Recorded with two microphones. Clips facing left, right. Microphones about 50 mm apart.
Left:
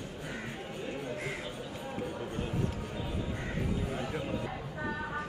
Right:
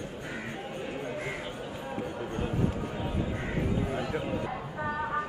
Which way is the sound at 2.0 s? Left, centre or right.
Centre.